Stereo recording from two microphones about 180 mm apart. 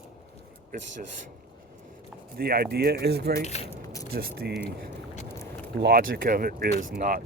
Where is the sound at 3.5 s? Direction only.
35° left (ahead or behind).